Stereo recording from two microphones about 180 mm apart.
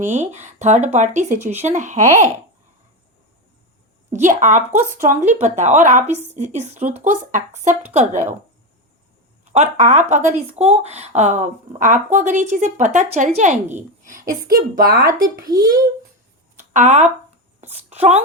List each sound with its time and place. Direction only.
0.0 s speech: 40° right (ahead or behind)
4.1 s speech: 45° right (ahead or behind)
9.4 s a woman's voice: 40° right (ahead or behind); by 15.3 s 55° right (ahead or behind)
15.4 s a child's voice: 20° right (ahead or behind)
16.6 s a sound: 40° right (ahead or behind)
17.6 s speech: 40° right (ahead or behind)